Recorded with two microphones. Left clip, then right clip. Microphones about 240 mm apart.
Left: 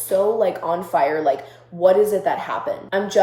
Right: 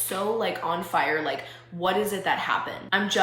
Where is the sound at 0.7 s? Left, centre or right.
Right.